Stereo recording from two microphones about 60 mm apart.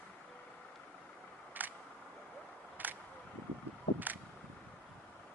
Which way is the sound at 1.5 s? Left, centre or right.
Right.